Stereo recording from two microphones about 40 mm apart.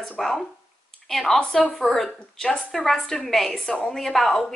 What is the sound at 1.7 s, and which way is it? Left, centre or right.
Speech, centre.